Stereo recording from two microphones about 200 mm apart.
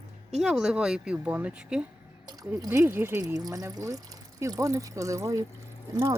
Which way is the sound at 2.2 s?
15° right (ahead or behind).